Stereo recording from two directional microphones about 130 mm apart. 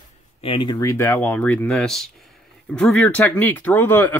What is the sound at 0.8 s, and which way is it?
Speech, 20° left (ahead or behind).